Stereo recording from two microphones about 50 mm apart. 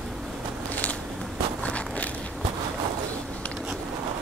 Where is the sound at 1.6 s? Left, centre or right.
Left.